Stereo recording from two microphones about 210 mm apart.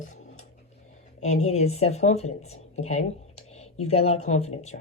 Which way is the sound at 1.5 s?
30° left (ahead or behind).